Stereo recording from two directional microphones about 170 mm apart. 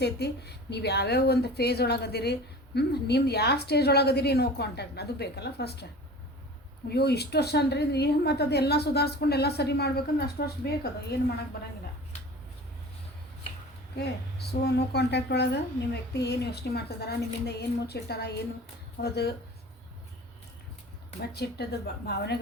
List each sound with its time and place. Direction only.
0.0 s speech: 75° left (ahead or behind)
6.8 s speech: 70° left (ahead or behind)
13.9 s speech: 75° left (ahead or behind)
21.2 s speech: 75° left (ahead or behind)